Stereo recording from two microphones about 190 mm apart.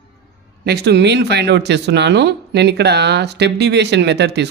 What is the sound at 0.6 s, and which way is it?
Speech, 60° right (ahead or behind).